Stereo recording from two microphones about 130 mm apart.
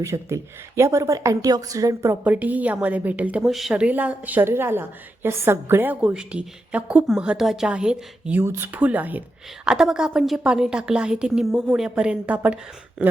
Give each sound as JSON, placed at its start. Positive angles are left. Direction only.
{"t": 0.0, "sound": "speech", "side_deg": -20}
{"t": 2.2, "sound": "a woman's voice", "side_deg": -10}